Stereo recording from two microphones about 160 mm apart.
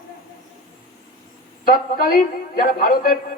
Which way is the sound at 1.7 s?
65° left (ahead or behind).